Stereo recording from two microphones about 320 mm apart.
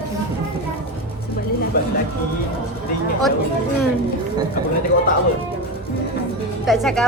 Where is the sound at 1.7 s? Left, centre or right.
Left.